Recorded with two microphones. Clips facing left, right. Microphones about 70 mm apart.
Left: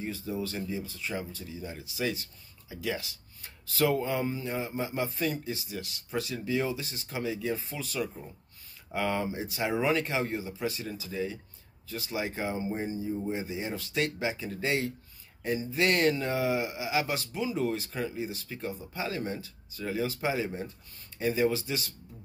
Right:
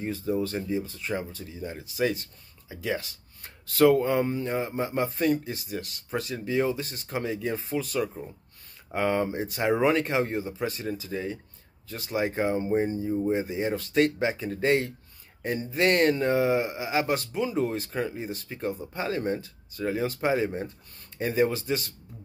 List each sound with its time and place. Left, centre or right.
0.0 s speech: right